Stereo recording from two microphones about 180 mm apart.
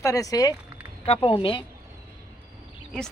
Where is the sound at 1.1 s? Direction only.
30° left (ahead or behind).